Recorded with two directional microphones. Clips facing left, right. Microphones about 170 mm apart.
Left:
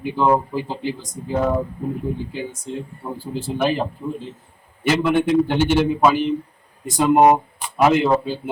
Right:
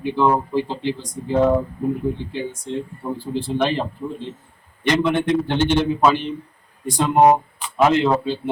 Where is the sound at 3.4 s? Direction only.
5° left (ahead or behind).